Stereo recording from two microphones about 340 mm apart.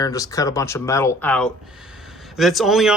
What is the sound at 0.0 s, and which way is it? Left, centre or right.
Speech, centre.